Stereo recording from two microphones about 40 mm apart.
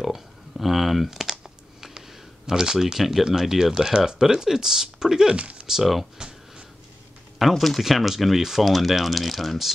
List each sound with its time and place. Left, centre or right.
0.0 s computer keyboard: centre
1.2 s a sound: centre
3.3 s speech: centre
5.3 s speech: right
6.1 s a sound: centre
7.3 s speech: centre